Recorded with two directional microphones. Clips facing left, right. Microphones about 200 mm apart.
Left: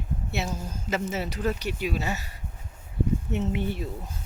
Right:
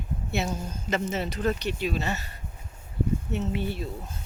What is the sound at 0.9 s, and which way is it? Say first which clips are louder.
Speech: right 1 dB; 5° left (ahead or behind).